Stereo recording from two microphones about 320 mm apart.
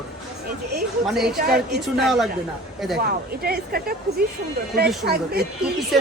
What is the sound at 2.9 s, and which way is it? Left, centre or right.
Speech, right.